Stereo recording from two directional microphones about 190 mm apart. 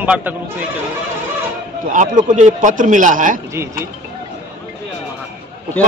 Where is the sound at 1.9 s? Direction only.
40° right (ahead or behind).